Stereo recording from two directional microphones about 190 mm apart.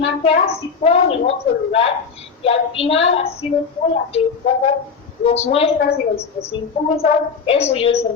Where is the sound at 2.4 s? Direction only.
30° left (ahead or behind).